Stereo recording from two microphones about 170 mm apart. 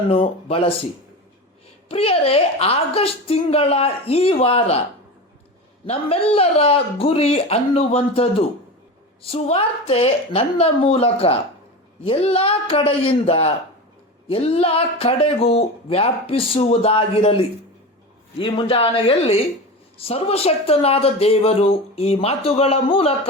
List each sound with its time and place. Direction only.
0.1 s speech: 35° left (ahead or behind)
1.9 s speech: 35° left (ahead or behind)
5.8 s speech: 35° left (ahead or behind)